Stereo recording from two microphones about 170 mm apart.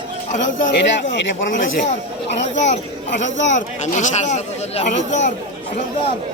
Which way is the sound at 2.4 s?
40° left (ahead or behind).